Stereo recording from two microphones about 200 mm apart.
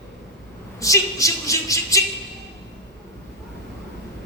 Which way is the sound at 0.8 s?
15° left (ahead or behind).